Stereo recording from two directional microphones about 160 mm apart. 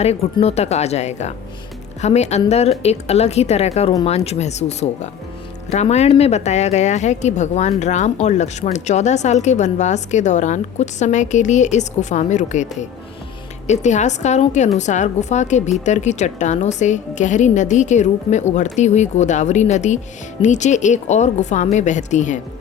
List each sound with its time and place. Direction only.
0.3 s a woman's voice: 40° left (ahead or behind)
13.7 s a woman's voice: 45° left (ahead or behind)